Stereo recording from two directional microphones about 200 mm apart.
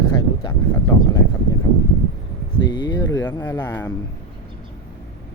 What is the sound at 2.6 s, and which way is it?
Speech, 20° left (ahead or behind).